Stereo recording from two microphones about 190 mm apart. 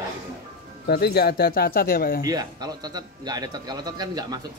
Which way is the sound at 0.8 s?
55° left (ahead or behind).